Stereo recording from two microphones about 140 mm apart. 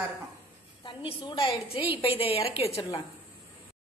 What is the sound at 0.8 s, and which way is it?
A woman's voice, 35° left (ahead or behind).